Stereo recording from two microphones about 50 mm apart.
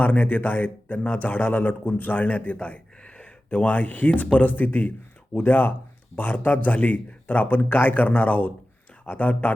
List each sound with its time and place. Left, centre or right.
0.0 s a man's voice: left